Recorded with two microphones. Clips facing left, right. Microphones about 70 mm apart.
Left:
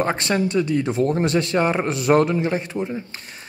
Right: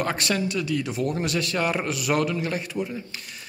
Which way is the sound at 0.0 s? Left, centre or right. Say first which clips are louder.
Left 4 dB; left.